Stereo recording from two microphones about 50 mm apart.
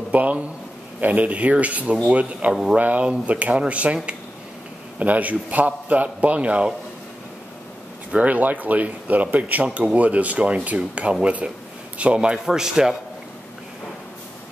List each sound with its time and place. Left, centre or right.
0.1 s a man's voice: right
8.1 s a man's voice: right; by 12.9 s centre